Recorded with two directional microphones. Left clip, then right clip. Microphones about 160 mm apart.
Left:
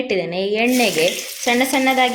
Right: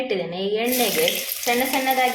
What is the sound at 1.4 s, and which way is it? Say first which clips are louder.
Speech: left 5 dB; 65° left (ahead or behind).